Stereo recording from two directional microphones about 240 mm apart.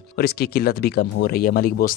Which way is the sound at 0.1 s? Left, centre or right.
Left.